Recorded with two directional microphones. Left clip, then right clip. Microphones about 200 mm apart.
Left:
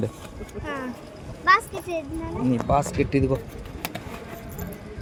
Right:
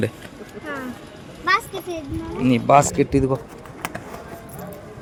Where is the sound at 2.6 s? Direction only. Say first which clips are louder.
Right 9 dB; 20° right (ahead or behind).